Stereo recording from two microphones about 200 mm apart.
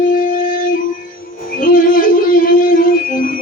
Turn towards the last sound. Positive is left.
turn(degrees=45)  # may be behind; listen again after turning